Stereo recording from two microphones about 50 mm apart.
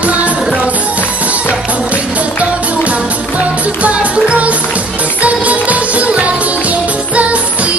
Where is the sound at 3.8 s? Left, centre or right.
Right.